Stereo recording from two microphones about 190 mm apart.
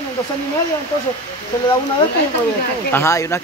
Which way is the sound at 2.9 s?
15° left (ahead or behind).